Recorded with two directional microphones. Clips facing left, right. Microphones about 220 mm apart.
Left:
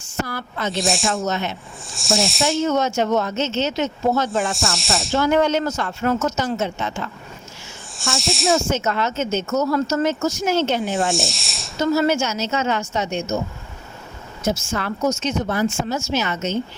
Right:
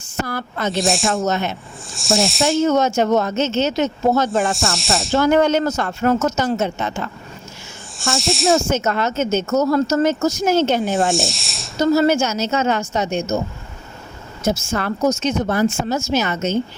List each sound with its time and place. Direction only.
0.3 s a woman's voice: 50° right (ahead or behind)
0.7 s snake: centre (ahead or behind)
1.2 s a woman's voice: 50° right (ahead or behind)
1.9 s snake: centre (ahead or behind)
2.6 s a woman's voice: 45° right (ahead or behind)
4.4 s snake: centre (ahead or behind)
5.1 s a woman's voice: 50° right (ahead or behind)
7.9 s snake: centre (ahead or behind)
8.7 s a woman's voice: 45° right (ahead or behind)
10.9 s snake: centre (ahead or behind)
11.8 s a woman's voice: 40° right (ahead or behind)
14.4 s a woman's voice: 45° right (ahead or behind)